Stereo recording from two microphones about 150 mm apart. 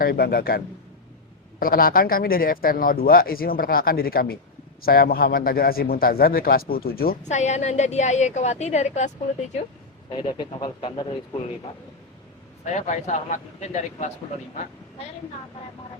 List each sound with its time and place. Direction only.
0.0 s a man's voice: 90° left
1.5 s a man's voice: 75° left (ahead or behind)
7.2 s a woman's voice: 50° left (ahead or behind)
10.1 s speech: 30° left (ahead or behind)
12.7 s a woman's voice: 50° left (ahead or behind)